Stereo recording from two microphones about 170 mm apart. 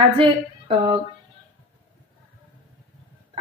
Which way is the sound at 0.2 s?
30° right (ahead or behind).